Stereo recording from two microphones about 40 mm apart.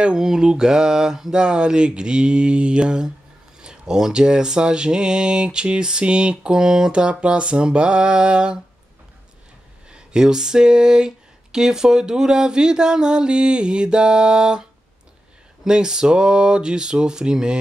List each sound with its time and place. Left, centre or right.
0.0 s speech: centre
9.8 s speech: right